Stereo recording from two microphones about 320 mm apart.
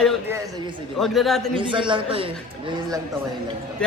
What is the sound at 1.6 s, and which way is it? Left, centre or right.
Speech, centre.